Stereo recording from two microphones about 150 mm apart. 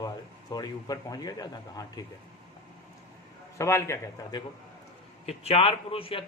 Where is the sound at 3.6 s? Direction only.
20° left (ahead or behind).